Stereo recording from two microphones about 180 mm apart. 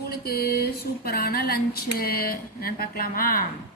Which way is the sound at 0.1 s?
60° left (ahead or behind).